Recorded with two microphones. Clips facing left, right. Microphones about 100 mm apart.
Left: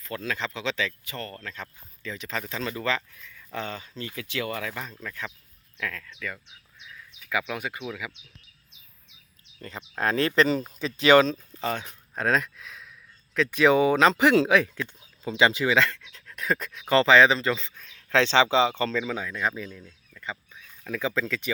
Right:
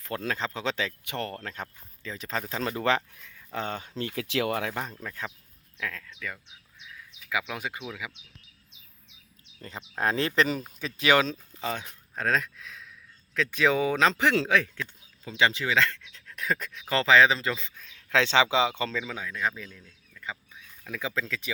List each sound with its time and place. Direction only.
0.0 s speech: 50° right (ahead or behind)
1.0 s speech: 65° right (ahead or behind)
1.6 s speech: 35° right (ahead or behind); by 3.2 s 55° right (ahead or behind)
3.3 s speech: 40° right (ahead or behind)
3.9 s speech: 70° right (ahead or behind)
4.5 s speech: 50° right (ahead or behind)
5.0 s speech: 30° right (ahead or behind)
5.7 s speech: 10° right (ahead or behind)
9.6 s speech: 25° right (ahead or behind)
19.0 s speech: centre (ahead or behind)
20.8 s speech: 5° right (ahead or behind)